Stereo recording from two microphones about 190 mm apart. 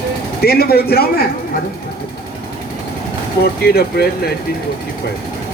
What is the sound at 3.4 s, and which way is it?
Speech, 55° left (ahead or behind).